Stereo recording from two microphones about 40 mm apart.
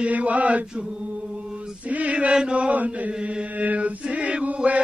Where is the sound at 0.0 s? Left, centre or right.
Right.